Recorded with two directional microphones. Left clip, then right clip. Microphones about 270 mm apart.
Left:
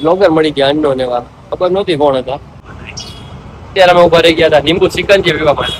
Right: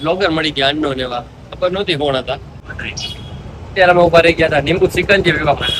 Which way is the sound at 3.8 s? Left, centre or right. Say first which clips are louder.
Left 3 dB; left.